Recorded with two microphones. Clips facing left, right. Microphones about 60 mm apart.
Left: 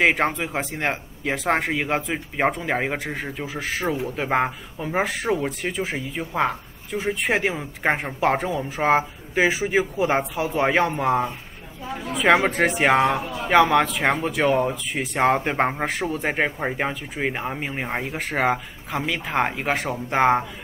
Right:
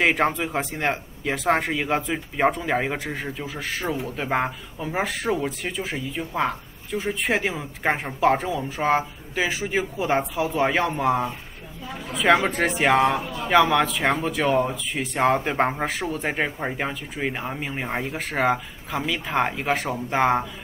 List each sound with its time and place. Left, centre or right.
0.0 s speech: centre
7.4 s speech: centre
9.3 s speech: left